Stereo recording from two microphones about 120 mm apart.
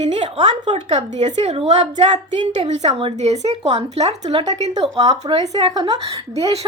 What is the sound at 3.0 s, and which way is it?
Speech, 50° right (ahead or behind).